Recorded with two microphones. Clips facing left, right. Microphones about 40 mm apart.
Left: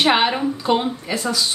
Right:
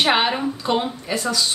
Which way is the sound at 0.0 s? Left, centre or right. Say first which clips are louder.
Left 2 dB; centre.